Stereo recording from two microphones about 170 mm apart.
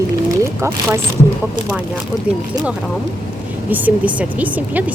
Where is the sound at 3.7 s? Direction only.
10° right (ahead or behind).